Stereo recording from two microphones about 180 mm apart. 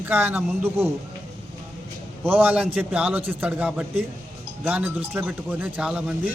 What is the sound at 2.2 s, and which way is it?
A man's voice, 10° right (ahead or behind).